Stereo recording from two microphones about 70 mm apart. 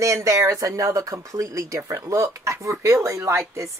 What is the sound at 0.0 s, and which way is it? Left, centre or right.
Speech, right.